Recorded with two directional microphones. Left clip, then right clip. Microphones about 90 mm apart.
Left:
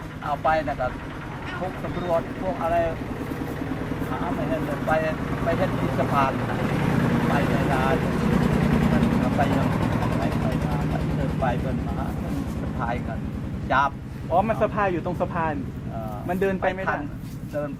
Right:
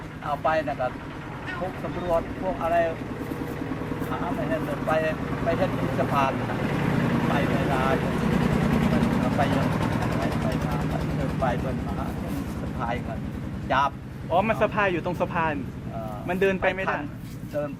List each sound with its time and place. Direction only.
0.3 s speech: centre (ahead or behind)
2.0 s speech: centre (ahead or behind)
4.4 s speech: 5° right (ahead or behind)
6.5 s vehicle: 20° left (ahead or behind)
7.4 s speech: 10° left (ahead or behind)
7.7 s vehicle: centre (ahead or behind); by 11.4 s 30° right (ahead or behind)
13.7 s speech: centre (ahead or behind)
14.3 s speech: 40° right (ahead or behind)